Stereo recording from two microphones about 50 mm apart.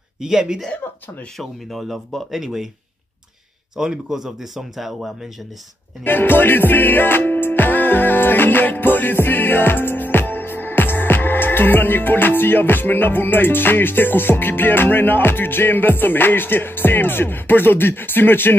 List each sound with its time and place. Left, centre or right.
0.2 s speech: centre
1.4 s speech: centre
3.7 s speech: centre
6.0 s music: left